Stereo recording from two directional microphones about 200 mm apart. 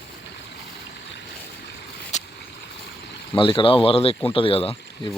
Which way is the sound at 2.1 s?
35° left (ahead or behind).